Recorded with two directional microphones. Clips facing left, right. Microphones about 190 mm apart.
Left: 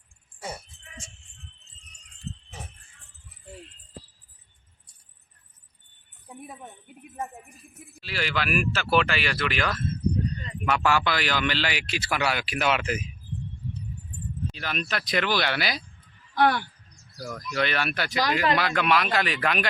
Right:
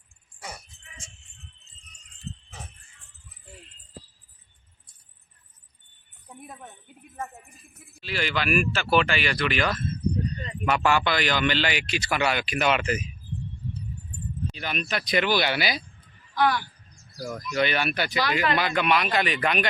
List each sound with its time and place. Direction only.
6.2 s jingle bell: 10° left (ahead or behind)
8.0 s speech: 5° left (ahead or behind)
14.5 s speech: centre (ahead or behind)
16.3 s speech: 55° left (ahead or behind)
17.2 s speech: 5° right (ahead or behind)